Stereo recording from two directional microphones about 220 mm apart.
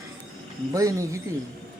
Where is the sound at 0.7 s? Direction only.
15° right (ahead or behind).